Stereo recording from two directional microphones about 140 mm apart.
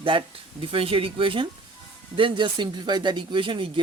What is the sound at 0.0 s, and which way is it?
Speech, 40° right (ahead or behind).